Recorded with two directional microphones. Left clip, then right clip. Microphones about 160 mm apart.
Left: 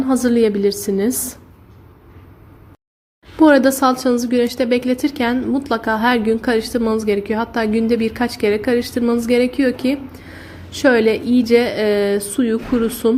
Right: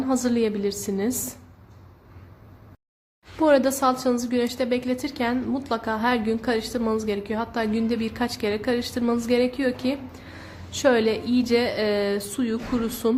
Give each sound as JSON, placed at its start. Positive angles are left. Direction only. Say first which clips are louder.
{"t": 0.1, "sound": "a woman's voice", "louder": "left 8 dB", "side_deg": 15}
{"t": 3.3, "sound": "a woman's voice", "louder": "left 7 dB", "side_deg": 15}